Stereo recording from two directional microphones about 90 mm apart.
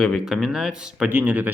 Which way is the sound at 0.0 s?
5° right (ahead or behind).